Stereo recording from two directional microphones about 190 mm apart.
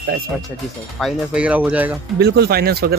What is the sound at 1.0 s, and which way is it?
Music, 5° right (ahead or behind).